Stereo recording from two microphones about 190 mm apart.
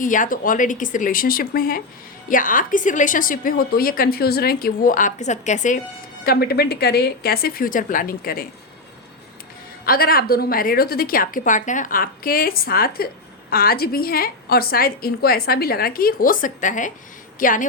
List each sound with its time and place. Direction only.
0.0 s a woman's voice: 45° left (ahead or behind)
6.2 s a woman's voice: 55° left (ahead or behind)
9.8 s a woman's voice: 50° left (ahead or behind)